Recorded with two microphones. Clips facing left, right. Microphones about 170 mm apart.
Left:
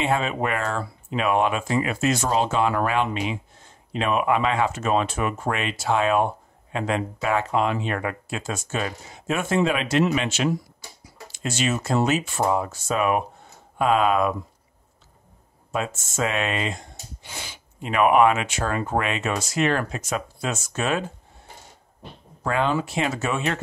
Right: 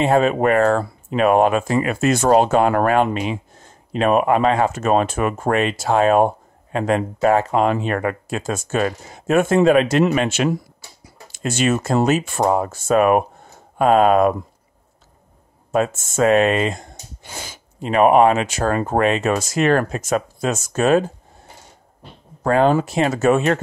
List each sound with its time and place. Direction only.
0.0 s speech: 45° right (ahead or behind)
15.7 s speech: 45° right (ahead or behind)
22.4 s speech: 45° right (ahead or behind)